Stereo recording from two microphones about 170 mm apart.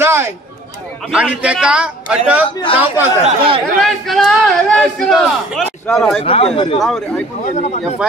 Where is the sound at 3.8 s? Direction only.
Centre (ahead or behind).